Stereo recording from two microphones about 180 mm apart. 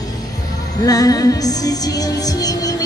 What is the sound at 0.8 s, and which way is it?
Music, 20° left (ahead or behind).